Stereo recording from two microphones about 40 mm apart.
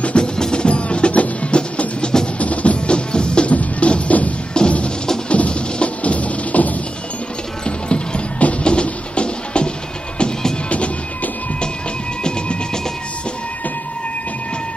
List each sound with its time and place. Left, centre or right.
0.0 s music: left
3.1 s music: left
3.5 s music: left
7.6 s a sound: left
8.6 s music: left
12.2 s music: left